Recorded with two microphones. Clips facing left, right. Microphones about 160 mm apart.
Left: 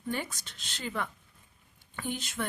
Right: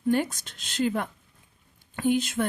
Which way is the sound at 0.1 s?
50° right (ahead or behind).